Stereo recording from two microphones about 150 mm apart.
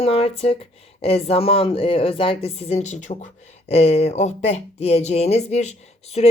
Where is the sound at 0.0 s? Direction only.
40° left (ahead or behind).